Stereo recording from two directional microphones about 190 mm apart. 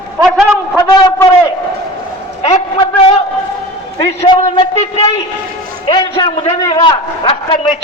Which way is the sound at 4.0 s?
30° left (ahead or behind).